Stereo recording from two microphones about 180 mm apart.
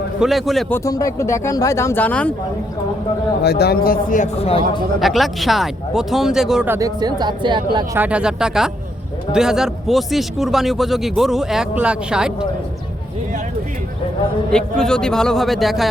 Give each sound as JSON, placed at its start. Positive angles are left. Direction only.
{"t": 0.2, "sound": "speech", "side_deg": 0}
{"t": 0.7, "sound": "speech", "side_deg": 20}
{"t": 3.4, "sound": "speech", "side_deg": 65}
{"t": 4.9, "sound": "speech", "side_deg": 0}
{"t": 6.7, "sound": "speech", "side_deg": -20}
{"t": 7.9, "sound": "speech", "side_deg": -10}
{"t": 14.5, "sound": "speech", "side_deg": 5}